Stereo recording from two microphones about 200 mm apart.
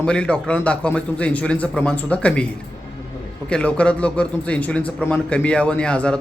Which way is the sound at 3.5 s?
5° left (ahead or behind).